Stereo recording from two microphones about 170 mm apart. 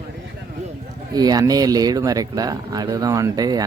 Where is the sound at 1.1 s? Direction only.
25° right (ahead or behind).